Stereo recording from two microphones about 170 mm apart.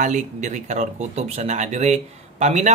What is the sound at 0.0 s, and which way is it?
Speech, 45° right (ahead or behind).